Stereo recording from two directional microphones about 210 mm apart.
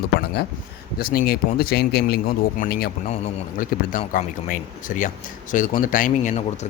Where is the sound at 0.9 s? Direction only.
45° left (ahead or behind).